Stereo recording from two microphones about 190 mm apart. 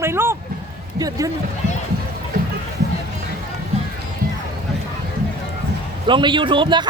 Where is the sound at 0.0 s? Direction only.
15° right (ahead or behind).